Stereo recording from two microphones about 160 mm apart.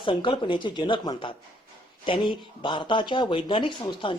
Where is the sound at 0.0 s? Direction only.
30° left (ahead or behind).